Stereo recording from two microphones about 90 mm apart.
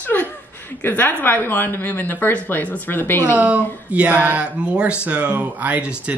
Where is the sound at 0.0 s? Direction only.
20° left (ahead or behind).